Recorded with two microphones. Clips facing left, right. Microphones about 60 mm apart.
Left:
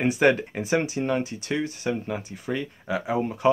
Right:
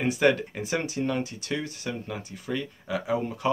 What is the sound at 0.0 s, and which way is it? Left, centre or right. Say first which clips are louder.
Speech: left 2 dB; left.